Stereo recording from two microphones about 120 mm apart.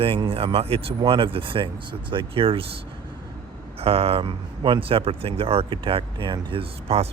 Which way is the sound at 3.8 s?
55° right (ahead or behind).